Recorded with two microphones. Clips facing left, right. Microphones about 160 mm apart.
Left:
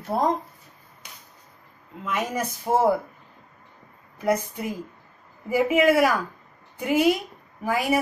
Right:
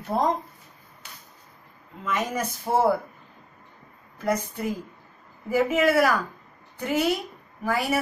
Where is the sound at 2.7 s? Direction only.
10° left (ahead or behind).